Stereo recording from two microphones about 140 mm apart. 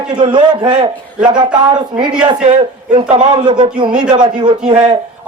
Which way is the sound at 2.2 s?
35° right (ahead or behind).